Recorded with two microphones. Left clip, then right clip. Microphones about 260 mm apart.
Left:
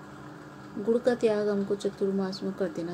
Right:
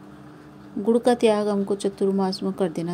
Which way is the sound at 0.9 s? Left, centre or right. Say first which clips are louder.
Right 6 dB; right.